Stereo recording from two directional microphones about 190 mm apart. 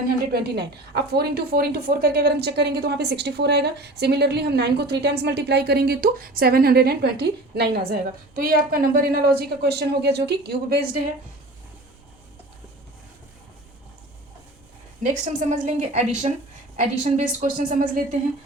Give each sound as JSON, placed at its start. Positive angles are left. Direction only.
{"t": 0.3, "sound": "a woman's voice", "side_deg": -60}
{"t": 15.0, "sound": "a woman's voice", "side_deg": -40}